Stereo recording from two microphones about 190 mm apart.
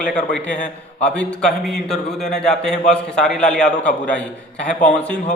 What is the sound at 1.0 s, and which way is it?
A man's voice, 5° left (ahead or behind).